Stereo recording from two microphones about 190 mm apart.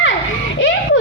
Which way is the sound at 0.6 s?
75° left (ahead or behind).